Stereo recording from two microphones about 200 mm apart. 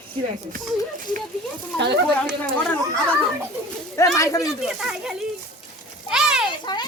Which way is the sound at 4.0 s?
15° left (ahead or behind).